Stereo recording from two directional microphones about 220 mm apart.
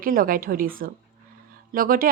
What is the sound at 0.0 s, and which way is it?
A woman's voice, 40° right (ahead or behind).